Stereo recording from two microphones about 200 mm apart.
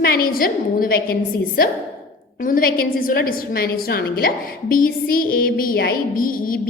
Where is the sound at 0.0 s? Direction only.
45° left (ahead or behind).